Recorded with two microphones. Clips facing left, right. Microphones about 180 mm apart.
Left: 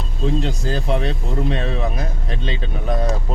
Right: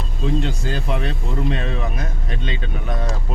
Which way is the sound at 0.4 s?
35° left (ahead or behind).